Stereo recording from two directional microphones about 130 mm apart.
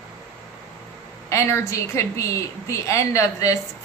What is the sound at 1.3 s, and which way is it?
A woman's voice, 20° left (ahead or behind).